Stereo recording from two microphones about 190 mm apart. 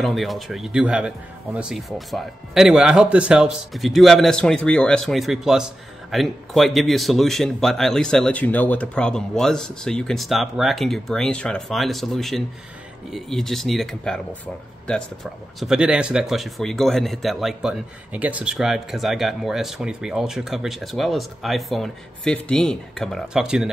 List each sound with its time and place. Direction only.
0.0 s speech: centre (ahead or behind)